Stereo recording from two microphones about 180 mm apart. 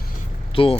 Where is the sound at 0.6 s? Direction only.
30° left (ahead or behind).